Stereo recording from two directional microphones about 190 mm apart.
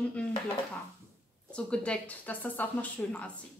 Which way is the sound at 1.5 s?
5° left (ahead or behind).